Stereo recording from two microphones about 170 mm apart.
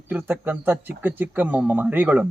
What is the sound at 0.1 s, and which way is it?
Speech, 10° right (ahead or behind).